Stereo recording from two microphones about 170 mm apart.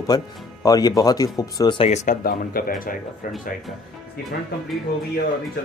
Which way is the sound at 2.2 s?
60° left (ahead or behind).